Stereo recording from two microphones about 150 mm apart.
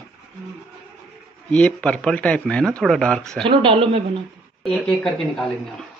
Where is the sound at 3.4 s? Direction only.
35° right (ahead or behind).